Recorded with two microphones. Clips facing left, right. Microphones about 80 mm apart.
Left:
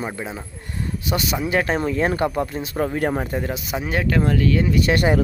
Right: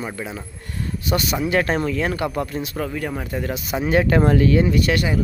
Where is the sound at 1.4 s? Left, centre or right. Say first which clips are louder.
Right 1 dB; centre.